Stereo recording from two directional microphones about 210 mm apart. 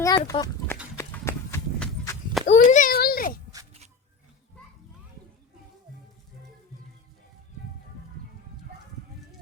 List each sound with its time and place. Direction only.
0.0 s a sound: 15° left (ahead or behind)
0.9 s clip-clop: 10° left (ahead or behind)
2.5 s children playing: 40° left (ahead or behind)